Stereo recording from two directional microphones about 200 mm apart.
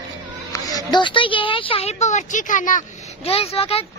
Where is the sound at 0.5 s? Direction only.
20° left (ahead or behind).